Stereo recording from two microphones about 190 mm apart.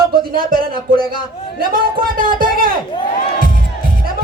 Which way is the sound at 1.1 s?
50° right (ahead or behind).